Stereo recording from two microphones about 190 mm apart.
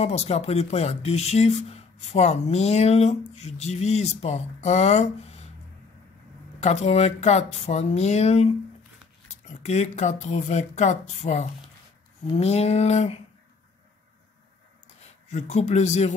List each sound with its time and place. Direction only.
0.0 s speech: 35° left (ahead or behind)
6.6 s speech: 35° left (ahead or behind)
15.2 s speech: 35° left (ahead or behind)